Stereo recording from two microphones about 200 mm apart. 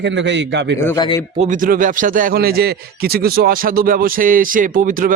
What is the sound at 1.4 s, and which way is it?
A man's voice, 40° right (ahead or behind).